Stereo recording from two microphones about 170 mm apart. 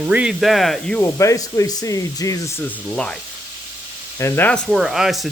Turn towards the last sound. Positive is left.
turn(degrees=0)  # may be behind; listen again after turning